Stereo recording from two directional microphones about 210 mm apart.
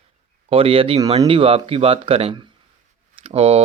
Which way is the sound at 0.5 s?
25° right (ahead or behind).